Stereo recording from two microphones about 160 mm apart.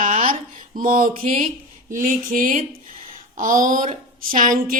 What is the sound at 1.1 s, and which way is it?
Speech, 40° right (ahead or behind).